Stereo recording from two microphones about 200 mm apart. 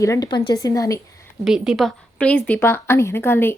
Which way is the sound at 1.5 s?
Centre (ahead or behind).